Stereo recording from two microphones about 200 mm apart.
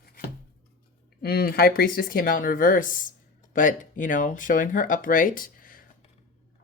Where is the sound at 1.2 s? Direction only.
50° left (ahead or behind).